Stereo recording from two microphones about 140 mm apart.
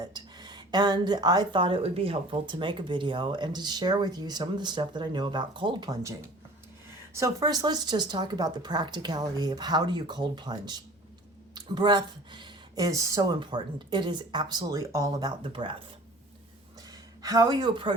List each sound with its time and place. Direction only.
0.0 s a woman's voice: 30° right (ahead or behind)
16.9 s speech: 25° right (ahead or behind)